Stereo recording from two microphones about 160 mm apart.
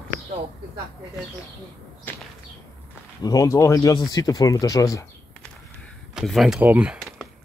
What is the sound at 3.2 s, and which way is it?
Speech, 20° left (ahead or behind).